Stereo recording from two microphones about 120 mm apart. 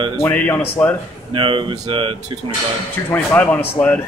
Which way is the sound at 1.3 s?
45° right (ahead or behind).